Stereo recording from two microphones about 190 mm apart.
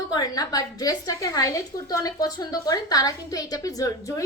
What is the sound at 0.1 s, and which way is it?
A woman's voice, 20° left (ahead or behind).